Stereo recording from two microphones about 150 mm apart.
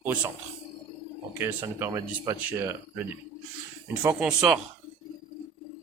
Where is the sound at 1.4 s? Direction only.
15° right (ahead or behind).